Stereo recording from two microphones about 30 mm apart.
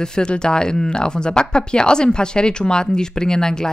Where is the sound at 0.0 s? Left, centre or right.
Left.